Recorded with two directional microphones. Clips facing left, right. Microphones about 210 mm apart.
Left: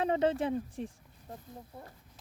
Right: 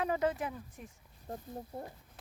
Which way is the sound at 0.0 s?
25° left (ahead or behind).